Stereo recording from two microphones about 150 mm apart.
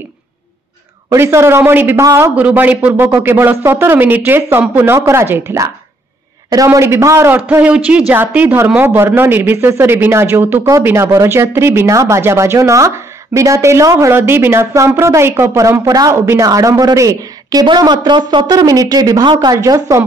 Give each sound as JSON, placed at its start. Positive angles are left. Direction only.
{"t": 1.1, "sound": "a woman's voice", "side_deg": -15}